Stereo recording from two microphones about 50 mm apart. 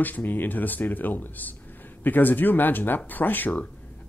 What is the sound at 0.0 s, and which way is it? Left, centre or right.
Speech, left.